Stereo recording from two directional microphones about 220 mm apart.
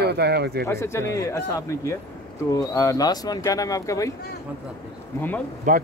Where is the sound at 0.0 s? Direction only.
45° right (ahead or behind).